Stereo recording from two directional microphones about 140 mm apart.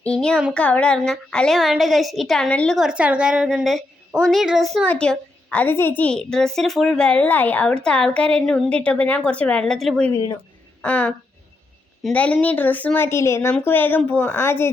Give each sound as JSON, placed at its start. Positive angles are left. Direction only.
{"t": 0.0, "sound": "a woman's voice", "side_deg": 5}
{"t": 2.7, "sound": "a woman's voice", "side_deg": -5}
{"t": 12.1, "sound": "a woman's voice", "side_deg": 10}